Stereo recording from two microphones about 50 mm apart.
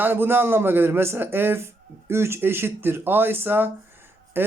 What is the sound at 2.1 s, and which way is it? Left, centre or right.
Speech, right.